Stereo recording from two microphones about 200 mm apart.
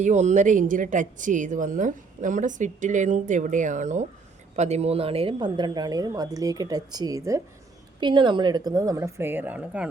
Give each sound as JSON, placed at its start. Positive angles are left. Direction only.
{"t": 0.0, "sound": "a woman's voice", "side_deg": -35}